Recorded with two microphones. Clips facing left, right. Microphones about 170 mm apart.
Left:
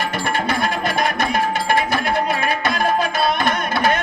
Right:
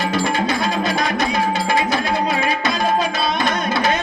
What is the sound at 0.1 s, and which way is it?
Music, 55° left (ahead or behind).